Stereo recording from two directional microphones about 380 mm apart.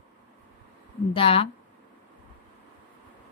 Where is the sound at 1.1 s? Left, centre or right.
Centre.